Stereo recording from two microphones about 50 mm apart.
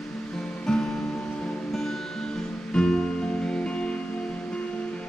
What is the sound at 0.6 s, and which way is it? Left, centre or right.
Music, centre.